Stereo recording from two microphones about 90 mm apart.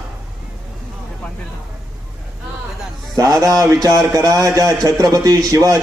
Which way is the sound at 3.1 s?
40° right (ahead or behind).